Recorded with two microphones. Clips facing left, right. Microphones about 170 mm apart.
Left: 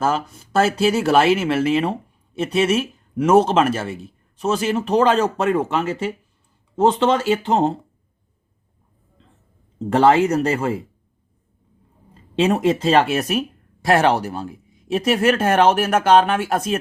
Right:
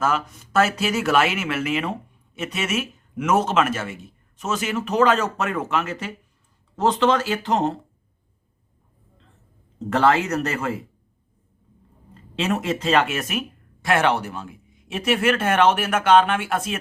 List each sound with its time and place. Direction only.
0.0 s speech: 30° left (ahead or behind)
9.7 s speech: 30° left (ahead or behind)
12.4 s speech: 35° left (ahead or behind)